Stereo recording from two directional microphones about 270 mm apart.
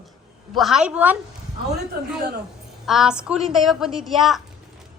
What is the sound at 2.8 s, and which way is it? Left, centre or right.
A woman's voice, centre.